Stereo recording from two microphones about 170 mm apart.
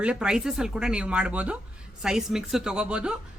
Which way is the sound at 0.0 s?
5° right (ahead or behind).